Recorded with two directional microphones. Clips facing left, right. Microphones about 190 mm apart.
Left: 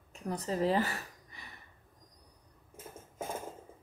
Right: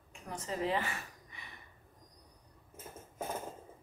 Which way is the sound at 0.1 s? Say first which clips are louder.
Left 5 dB; 35° left (ahead or behind).